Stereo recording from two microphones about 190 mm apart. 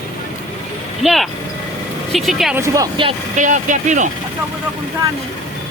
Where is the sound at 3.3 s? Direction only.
40° right (ahead or behind).